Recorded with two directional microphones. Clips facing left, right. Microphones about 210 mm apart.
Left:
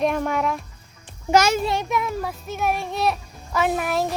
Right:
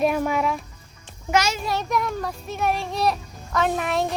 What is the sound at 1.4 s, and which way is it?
Speech, 50° left (ahead or behind).